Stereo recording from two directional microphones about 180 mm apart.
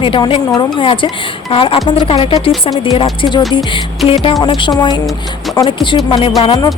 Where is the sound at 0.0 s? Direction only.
30° left (ahead or behind).